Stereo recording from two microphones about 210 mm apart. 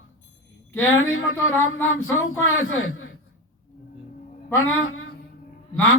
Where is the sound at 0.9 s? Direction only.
75° left (ahead or behind).